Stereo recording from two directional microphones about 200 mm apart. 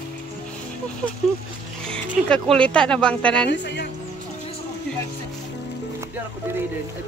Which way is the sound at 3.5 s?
60° left (ahead or behind).